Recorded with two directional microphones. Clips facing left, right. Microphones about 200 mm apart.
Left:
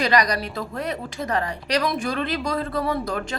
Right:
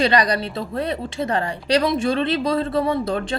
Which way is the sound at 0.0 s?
30° right (ahead or behind).